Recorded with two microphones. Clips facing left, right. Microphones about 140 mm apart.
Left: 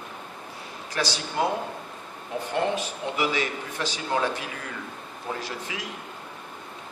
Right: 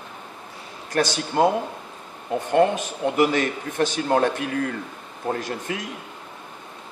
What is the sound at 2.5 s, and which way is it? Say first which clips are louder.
A man's voice: right 8 dB; 50° right (ahead or behind).